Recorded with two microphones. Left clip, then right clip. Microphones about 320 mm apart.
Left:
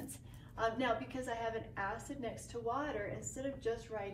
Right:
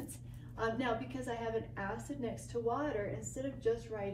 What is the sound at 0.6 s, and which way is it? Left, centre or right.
A woman's voice, centre.